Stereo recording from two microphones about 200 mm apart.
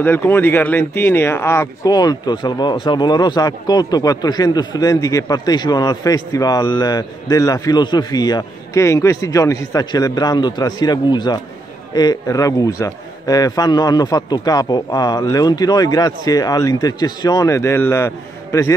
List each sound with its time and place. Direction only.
0.0 s a man's voice: 10° left (ahead or behind)